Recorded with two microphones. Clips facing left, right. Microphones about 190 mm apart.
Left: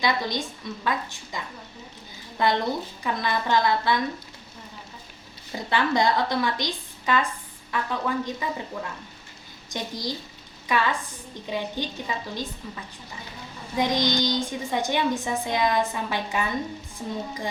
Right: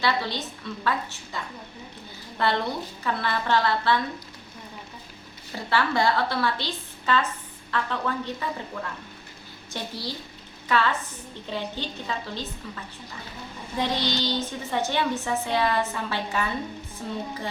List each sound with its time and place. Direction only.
0.0 s a woman's voice: 15° left (ahead or behind)
2.4 s a woman's voice: 15° left (ahead or behind)
5.5 s a woman's voice: 15° left (ahead or behind)
9.6 s a woman's voice: 15° left (ahead or behind)